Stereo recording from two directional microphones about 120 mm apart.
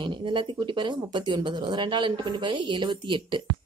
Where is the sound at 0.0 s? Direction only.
45° right (ahead or behind).